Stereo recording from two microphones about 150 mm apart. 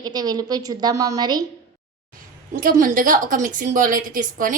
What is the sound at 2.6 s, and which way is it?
A woman's voice, 65° right (ahead or behind).